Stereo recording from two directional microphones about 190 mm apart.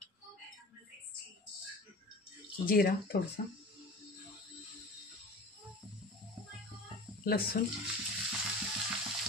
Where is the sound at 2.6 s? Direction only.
50° left (ahead or behind).